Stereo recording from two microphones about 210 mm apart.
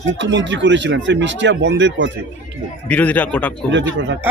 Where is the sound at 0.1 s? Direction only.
60° right (ahead or behind).